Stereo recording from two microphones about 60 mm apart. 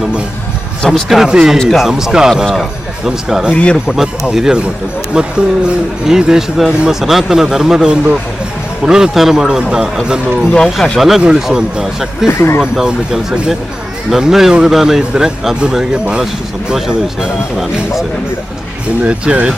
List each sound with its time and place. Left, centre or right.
0.8 s speech: centre
3.5 s speech: centre
3.8 s speech: centre
10.8 s speech: centre
11.2 s speech: centre
12.3 s speech: left
12.7 s speech: centre
19.0 s speech: centre